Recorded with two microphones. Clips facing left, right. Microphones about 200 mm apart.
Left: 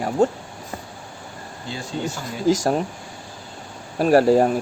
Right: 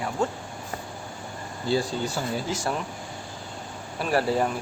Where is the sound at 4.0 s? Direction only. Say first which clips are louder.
Left 9 dB; 40° left (ahead or behind).